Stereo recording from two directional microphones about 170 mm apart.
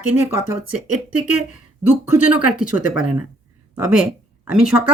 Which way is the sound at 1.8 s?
10° right (ahead or behind).